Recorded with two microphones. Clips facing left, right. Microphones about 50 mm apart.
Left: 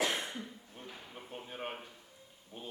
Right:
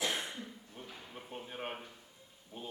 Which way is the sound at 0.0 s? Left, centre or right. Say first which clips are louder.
Left 2 dB; left.